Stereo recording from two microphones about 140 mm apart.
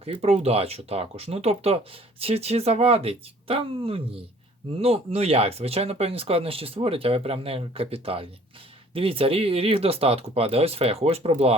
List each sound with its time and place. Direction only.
0.0 s speech: 45° right (ahead or behind)